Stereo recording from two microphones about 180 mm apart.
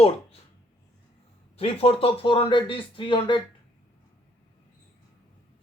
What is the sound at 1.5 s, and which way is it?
Speech, 35° left (ahead or behind).